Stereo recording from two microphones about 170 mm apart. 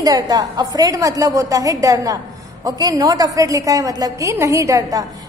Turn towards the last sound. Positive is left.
turn(degrees=-20)  # may be behind; listen again after turning